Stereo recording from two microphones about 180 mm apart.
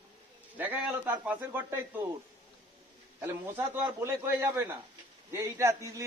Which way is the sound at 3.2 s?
15° right (ahead or behind).